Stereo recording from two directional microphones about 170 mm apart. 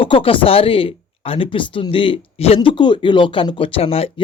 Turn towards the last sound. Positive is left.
turn(degrees=35)  # may be behind; listen again after turning